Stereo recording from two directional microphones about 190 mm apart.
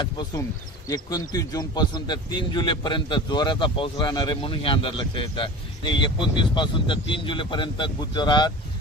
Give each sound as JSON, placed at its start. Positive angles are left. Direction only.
{"t": 0.8, "sound": "a man's voice", "side_deg": 20}